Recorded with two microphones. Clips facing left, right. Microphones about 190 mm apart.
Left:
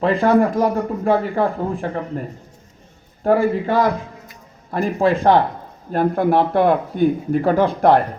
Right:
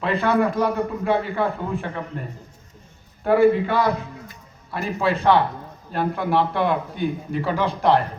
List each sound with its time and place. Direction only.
0.0 s speech: 45° left (ahead or behind)
3.2 s speech: 45° left (ahead or behind)